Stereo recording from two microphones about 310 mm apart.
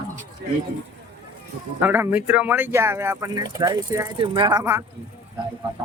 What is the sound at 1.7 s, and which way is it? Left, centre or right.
Speech, centre.